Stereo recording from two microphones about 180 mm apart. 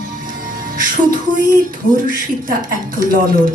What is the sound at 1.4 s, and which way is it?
Speech, 50° right (ahead or behind).